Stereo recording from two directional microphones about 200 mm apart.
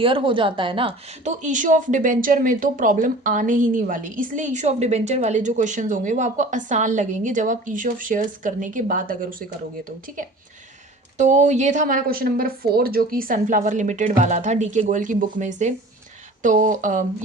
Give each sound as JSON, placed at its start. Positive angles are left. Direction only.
{"t": 0.0, "sound": "speech", "side_deg": -25}
{"t": 11.2, "sound": "speech", "side_deg": -35}